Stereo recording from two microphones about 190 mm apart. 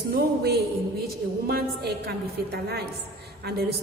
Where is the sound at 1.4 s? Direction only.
55° right (ahead or behind).